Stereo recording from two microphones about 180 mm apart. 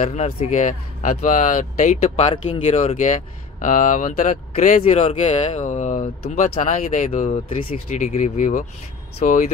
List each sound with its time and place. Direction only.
0.0 s speech: 35° left (ahead or behind)